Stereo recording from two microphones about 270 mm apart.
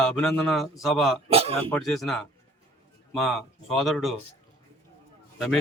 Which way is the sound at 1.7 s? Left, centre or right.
Centre.